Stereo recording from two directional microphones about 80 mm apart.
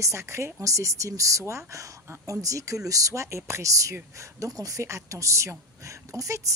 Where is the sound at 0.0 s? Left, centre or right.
Right.